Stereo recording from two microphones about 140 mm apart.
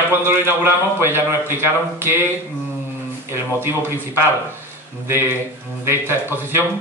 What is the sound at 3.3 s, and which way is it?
Speech, 15° right (ahead or behind).